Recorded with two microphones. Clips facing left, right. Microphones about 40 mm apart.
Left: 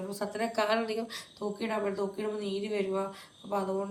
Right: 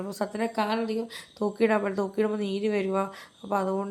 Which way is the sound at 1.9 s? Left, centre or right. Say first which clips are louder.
Right 6 dB; right.